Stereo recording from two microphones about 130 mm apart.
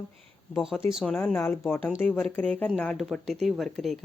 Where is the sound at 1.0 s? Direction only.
10° left (ahead or behind).